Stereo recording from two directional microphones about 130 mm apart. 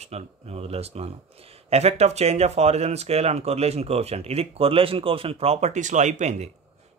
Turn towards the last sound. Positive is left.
turn(degrees=-60)  # may be behind; listen again after turning